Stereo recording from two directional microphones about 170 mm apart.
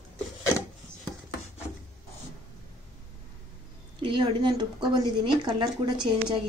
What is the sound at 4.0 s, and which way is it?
Speech, 30° right (ahead or behind).